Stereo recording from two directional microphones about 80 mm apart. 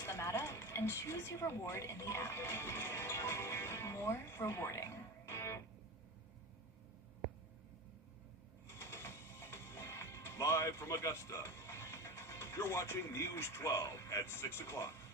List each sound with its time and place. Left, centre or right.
0.0 s speech: left
8.6 s music: left